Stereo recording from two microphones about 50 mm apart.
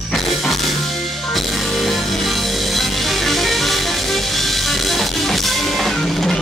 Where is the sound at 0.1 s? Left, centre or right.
Centre.